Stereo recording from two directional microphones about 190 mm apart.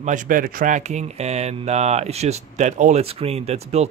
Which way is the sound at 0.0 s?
40° right (ahead or behind).